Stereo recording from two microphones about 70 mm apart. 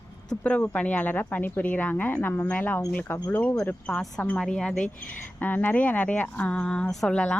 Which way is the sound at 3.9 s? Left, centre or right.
Centre.